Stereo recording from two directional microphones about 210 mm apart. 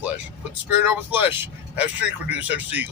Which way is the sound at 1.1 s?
10° right (ahead or behind).